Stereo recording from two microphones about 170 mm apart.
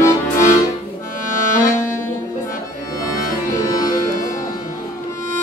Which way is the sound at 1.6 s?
15° left (ahead or behind).